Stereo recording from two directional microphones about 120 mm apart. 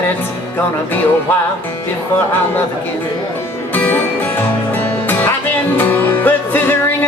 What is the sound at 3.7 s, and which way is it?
Music, 15° left (ahead or behind).